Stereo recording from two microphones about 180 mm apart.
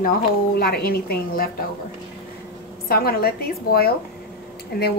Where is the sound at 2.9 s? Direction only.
60° left (ahead or behind).